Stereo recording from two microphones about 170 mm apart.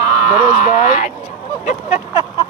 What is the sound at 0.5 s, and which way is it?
Speech, 45° left (ahead or behind).